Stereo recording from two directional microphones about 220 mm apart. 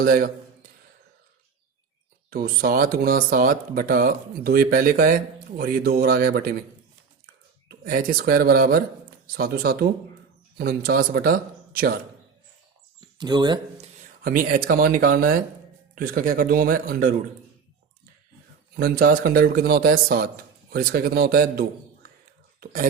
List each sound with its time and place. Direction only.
0.0 s speech: 45° right (ahead or behind)
2.3 s speech: 40° right (ahead or behind)
7.7 s speech: 40° right (ahead or behind)
13.1 s speech: 20° right (ahead or behind)
14.3 s speech: 40° right (ahead or behind)
18.8 s speech: 40° right (ahead or behind)